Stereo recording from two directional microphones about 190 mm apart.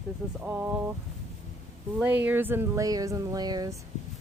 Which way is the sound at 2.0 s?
10° right (ahead or behind).